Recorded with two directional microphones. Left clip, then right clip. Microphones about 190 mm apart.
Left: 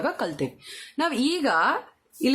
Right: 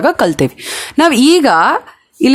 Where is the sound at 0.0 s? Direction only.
50° right (ahead or behind).